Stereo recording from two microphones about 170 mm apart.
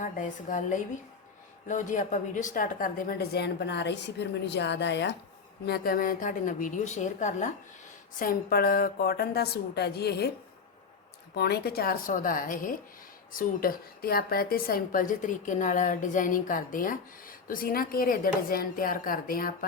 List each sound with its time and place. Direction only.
0.0 s a woman's voice: 50° left (ahead or behind); by 5.1 s 90° left
5.6 s a woman's voice: 65° left (ahead or behind); by 7.5 s 45° left (ahead or behind)
8.2 s a woman's voice: 60° left (ahead or behind)
11.3 s a woman's voice: 70° left (ahead or behind)